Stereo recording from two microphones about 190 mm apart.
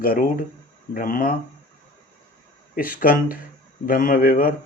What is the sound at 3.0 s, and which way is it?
Speech, 50° left (ahead or behind).